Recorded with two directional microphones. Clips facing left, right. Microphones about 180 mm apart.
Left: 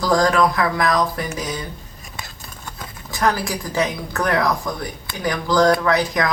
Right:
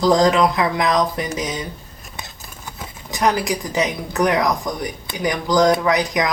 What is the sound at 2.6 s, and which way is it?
Speech, 20° right (ahead or behind).